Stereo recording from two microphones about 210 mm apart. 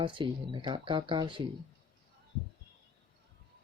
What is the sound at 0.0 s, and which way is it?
Speech, 25° right (ahead or behind).